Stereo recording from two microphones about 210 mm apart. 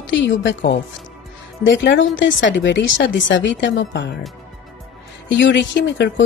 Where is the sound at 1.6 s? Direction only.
60° left (ahead or behind).